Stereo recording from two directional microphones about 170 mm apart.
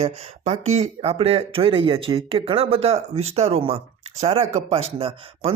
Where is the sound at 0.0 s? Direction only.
40° right (ahead or behind).